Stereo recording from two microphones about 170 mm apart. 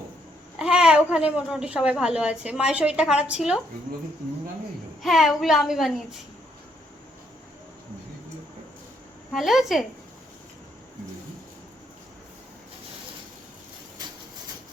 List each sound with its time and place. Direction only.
0.6 s a woman's voice: 5° right (ahead or behind)
5.0 s a woman's voice: centre (ahead or behind)
9.3 s a woman's voice: centre (ahead or behind)